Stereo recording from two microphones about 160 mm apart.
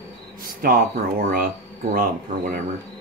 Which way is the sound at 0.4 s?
65° right (ahead or behind).